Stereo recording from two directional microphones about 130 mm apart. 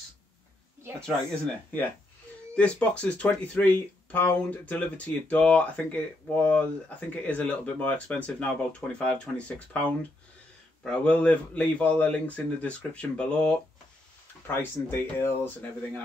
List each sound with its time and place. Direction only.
1.0 s speech: 10° left (ahead or behind)
14.6 s speech: 15° left (ahead or behind)